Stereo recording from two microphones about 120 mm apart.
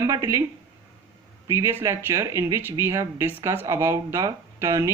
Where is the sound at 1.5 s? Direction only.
20° right (ahead or behind).